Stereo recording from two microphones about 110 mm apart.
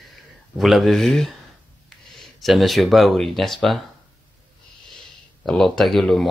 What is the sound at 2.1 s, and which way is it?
Speech, centre (ahead or behind).